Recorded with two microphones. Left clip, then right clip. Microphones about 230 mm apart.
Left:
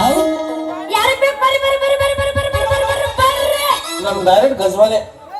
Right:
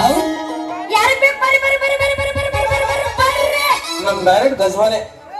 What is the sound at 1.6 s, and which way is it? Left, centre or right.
Music, left.